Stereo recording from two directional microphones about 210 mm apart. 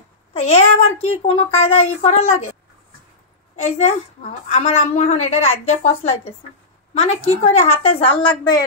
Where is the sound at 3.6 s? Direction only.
30° left (ahead or behind).